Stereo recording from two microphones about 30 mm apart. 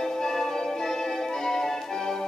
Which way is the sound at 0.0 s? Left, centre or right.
Centre.